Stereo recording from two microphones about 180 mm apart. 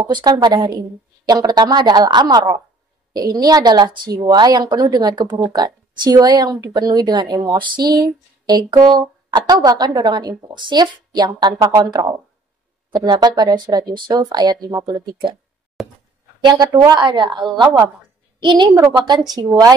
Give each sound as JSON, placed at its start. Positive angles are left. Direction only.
{"t": 0.0, "sound": "a woman's voice", "side_deg": -25}
{"t": 15.8, "sound": "speech", "side_deg": 0}
{"t": 16.3, "sound": "a woman's voice", "side_deg": -25}